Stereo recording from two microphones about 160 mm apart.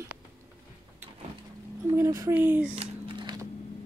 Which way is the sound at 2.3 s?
10° right (ahead or behind).